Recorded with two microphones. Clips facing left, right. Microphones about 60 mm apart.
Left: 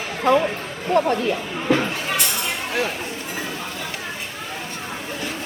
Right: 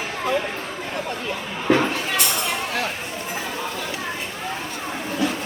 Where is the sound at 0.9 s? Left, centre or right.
Left.